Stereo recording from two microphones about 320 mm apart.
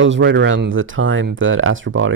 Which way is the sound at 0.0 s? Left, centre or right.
Right.